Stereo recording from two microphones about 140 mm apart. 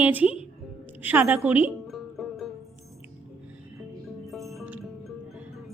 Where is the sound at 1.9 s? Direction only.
Centre (ahead or behind).